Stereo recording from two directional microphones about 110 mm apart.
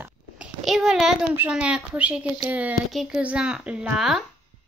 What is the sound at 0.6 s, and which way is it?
Speech, 5° right (ahead or behind).